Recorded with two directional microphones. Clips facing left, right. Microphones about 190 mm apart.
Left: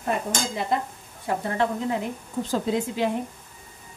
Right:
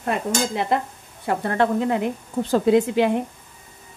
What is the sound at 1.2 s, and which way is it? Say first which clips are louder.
Stir: right 4 dB; 65° right (ahead or behind).